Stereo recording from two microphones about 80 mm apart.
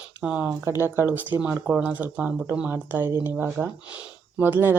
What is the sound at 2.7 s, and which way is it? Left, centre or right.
Speech, right.